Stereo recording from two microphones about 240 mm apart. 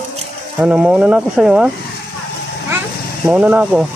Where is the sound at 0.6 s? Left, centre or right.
Centre.